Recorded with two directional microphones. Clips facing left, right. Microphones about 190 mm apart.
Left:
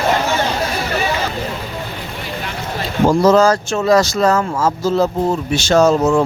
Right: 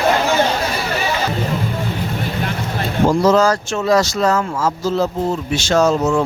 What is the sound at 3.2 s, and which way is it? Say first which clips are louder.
Speech: left 4 dB; 45° left (ahead or behind).